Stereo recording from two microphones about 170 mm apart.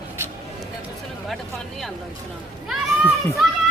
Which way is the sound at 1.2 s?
Centre (ahead or behind).